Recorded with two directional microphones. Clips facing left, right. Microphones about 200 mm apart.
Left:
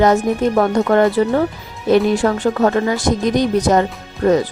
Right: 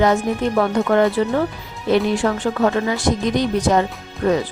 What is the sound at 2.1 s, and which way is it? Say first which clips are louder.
A woman's voice: left 3 dB; 40° left (ahead or behind).